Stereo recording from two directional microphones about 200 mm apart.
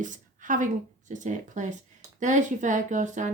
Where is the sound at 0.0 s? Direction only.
40° right (ahead or behind).